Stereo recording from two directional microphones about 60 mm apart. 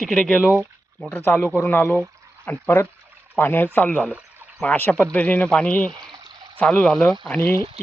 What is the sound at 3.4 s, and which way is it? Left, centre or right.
Speech, left.